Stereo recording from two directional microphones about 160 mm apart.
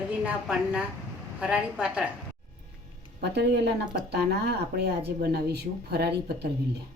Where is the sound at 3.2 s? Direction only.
90° right.